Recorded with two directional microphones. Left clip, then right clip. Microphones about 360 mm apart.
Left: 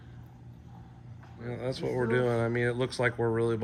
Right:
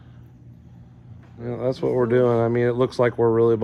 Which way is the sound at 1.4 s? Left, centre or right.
Right.